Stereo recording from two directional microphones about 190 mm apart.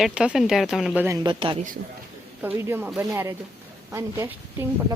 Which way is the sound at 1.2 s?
25° right (ahead or behind).